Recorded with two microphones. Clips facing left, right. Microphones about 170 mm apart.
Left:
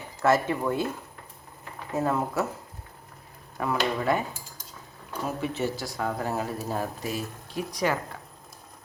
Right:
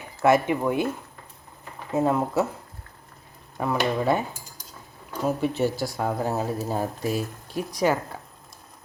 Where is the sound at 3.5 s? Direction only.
25° right (ahead or behind).